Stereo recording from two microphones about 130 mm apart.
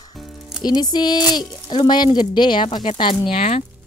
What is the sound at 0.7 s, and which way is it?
Speech, 30° left (ahead or behind).